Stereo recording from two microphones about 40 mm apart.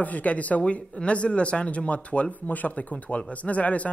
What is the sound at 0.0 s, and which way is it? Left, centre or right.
Speech, left.